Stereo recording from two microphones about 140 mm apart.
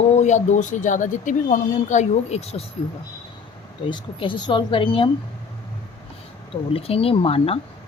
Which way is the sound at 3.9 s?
35° left (ahead or behind).